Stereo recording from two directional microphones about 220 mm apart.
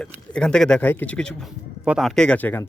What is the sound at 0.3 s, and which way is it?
Speech, 5° left (ahead or behind).